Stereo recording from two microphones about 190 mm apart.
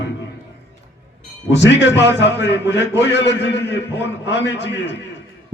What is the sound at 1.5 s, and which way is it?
Speech, 70° left (ahead or behind).